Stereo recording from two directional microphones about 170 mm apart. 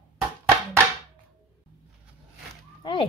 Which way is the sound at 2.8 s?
30° left (ahead or behind).